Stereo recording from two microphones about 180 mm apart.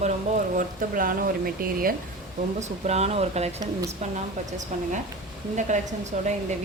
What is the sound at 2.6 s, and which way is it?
Speech, 40° right (ahead or behind).